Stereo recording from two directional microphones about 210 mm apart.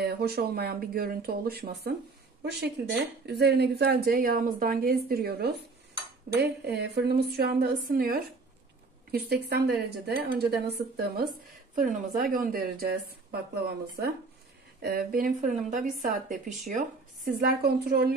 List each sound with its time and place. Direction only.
0.0 s a woman's voice: 50° right (ahead or behind)
3.3 s a woman's voice: 50° right (ahead or behind)
11.7 s a woman's voice: 40° right (ahead or behind)